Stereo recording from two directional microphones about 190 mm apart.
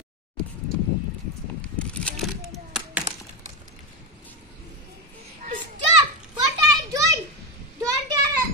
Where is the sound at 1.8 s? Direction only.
5° left (ahead or behind).